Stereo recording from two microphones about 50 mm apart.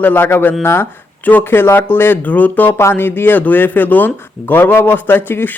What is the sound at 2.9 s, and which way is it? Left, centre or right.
Speech, left.